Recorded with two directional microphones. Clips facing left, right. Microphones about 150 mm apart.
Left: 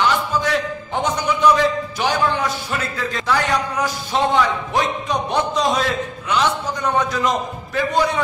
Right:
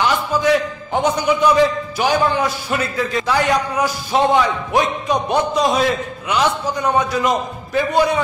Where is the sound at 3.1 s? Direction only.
10° right (ahead or behind).